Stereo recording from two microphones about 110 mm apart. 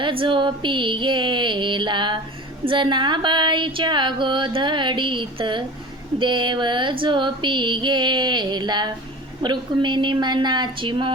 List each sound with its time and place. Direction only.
0.0 s speech: 50° right (ahead or behind)